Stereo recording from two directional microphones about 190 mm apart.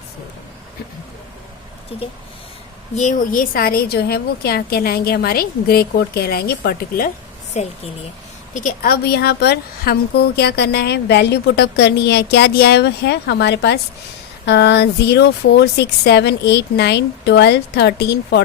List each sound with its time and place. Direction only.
2.9 s a woman's voice: 40° left (ahead or behind)
7.6 s a woman's voice: 35° left (ahead or behind); by 18.4 s 60° left (ahead or behind)